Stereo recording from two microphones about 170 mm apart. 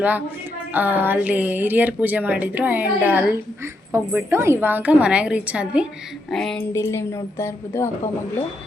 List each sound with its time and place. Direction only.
0.7 s a woman's voice: 10° right (ahead or behind)
6.3 s a sound: 5° left (ahead or behind)
6.7 s a woman's voice: 15° left (ahead or behind)